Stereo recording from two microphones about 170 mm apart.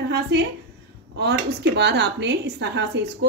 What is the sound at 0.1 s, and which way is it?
A woman's voice, 80° right.